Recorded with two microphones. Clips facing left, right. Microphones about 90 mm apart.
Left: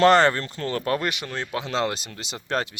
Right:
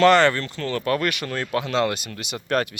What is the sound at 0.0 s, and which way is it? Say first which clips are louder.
Speech: right 1 dB; 35° left (ahead or behind).